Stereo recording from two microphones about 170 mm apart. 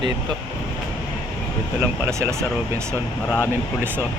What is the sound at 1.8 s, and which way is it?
Speech, 15° right (ahead or behind).